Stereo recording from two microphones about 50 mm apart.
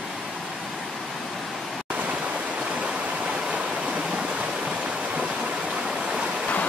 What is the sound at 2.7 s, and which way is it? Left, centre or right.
Stream, right.